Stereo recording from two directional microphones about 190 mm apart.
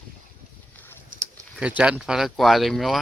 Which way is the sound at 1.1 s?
45° right (ahead or behind).